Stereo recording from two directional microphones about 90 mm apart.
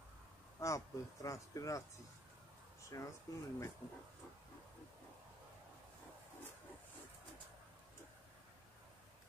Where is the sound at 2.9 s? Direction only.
35° left (ahead or behind).